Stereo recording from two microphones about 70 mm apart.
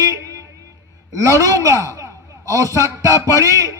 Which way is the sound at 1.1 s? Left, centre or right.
Right.